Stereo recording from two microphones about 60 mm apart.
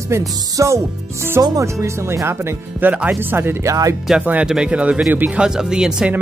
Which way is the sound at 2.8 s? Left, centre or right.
Right.